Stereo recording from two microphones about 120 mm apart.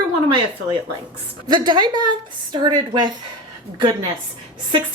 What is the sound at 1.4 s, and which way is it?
A woman's voice, 40° right (ahead or behind).